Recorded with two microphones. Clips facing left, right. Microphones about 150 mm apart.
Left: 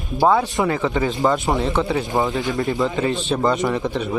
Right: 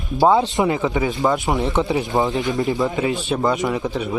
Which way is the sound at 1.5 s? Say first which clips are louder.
Right 1 dB; 20° right (ahead or behind).